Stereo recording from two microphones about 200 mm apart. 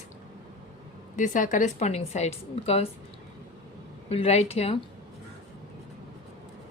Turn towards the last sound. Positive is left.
turn(degrees=30)  # may be behind; listen again after turning